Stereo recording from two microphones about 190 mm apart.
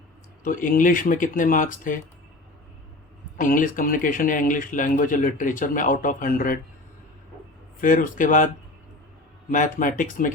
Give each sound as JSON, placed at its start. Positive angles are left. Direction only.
{"t": 0.4, "sound": "speech", "side_deg": 45}
{"t": 3.3, "sound": "speech", "side_deg": 45}
{"t": 7.8, "sound": "speech", "side_deg": 45}
{"t": 9.5, "sound": "speech", "side_deg": 45}